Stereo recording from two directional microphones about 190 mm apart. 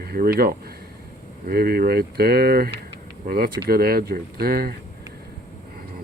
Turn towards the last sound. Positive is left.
turn(degrees=-50)  # may be behind; listen again after turning